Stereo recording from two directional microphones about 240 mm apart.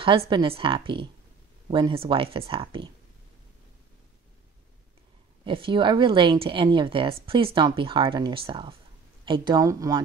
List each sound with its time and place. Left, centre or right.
0.3 s a woman's voice: right
5.4 s a woman's voice: right